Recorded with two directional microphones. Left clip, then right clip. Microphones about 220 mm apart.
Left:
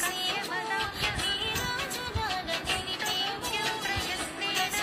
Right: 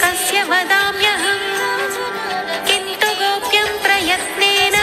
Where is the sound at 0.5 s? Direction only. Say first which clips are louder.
Right 17 dB; 45° right (ahead or behind).